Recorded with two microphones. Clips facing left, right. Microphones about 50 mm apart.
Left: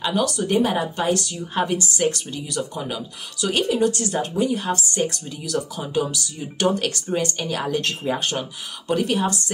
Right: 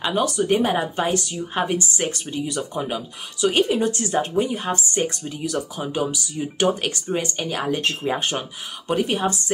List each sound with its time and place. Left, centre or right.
0.0 s speech: centre